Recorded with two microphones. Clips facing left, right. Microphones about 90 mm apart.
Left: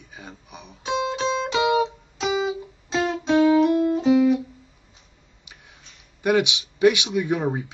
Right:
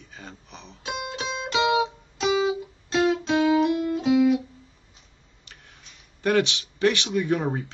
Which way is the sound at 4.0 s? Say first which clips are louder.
Even; 5° right (ahead or behind).